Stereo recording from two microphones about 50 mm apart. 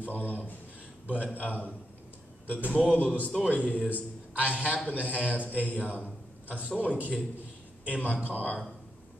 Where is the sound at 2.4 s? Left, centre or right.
Right.